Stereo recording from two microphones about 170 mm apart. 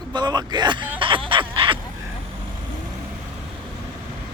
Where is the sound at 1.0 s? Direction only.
30° right (ahead or behind).